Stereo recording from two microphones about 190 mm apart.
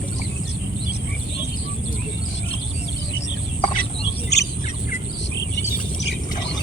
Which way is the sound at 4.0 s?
65° left (ahead or behind).